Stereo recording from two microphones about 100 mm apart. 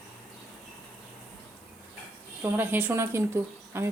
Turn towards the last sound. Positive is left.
turn(degrees=-25)  # may be behind; listen again after turning